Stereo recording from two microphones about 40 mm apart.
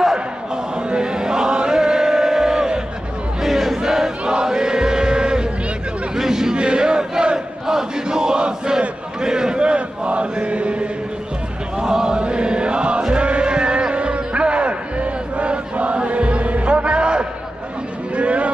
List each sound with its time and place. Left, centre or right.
0.8 s chant: right
3.4 s chant: centre; by 5.5 s right
6.1 s chatter: centre
6.5 s crowd: right
9.2 s chant: centre
11.8 s chant: centre
18.1 s a sound: right